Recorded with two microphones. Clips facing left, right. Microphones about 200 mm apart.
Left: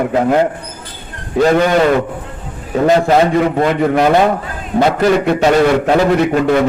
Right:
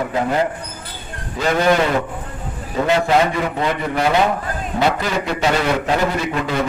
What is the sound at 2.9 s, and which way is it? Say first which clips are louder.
Speech: left 6 dB; 40° left (ahead or behind).